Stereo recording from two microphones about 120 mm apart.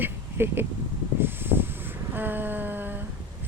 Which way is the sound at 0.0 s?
20° right (ahead or behind).